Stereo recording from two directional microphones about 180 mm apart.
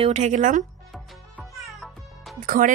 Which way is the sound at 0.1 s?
40° right (ahead or behind).